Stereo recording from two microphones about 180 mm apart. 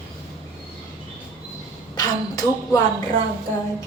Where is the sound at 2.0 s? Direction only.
20° left (ahead or behind).